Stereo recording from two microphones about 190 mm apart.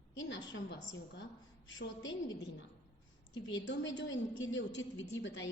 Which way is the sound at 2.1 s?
70° left (ahead or behind).